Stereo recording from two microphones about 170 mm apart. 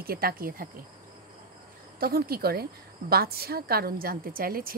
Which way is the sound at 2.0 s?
65° right (ahead or behind).